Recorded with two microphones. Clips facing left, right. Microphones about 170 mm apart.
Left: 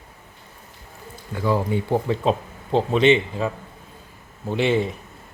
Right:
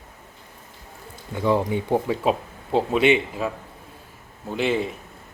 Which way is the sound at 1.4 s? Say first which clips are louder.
Right 1 dB; 20° right (ahead or behind).